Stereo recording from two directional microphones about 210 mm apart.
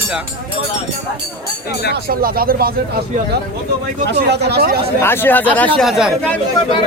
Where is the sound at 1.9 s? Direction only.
45° right (ahead or behind).